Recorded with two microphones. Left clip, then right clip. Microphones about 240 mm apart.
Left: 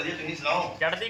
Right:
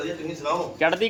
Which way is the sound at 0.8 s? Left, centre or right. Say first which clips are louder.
Right 8 dB; right.